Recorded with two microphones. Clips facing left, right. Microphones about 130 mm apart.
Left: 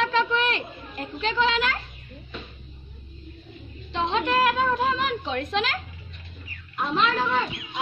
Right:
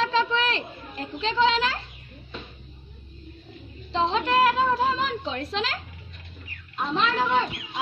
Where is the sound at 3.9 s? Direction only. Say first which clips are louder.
Right 1 dB; 30° right (ahead or behind).